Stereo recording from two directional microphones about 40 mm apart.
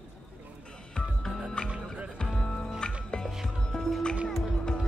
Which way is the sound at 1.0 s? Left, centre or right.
Left.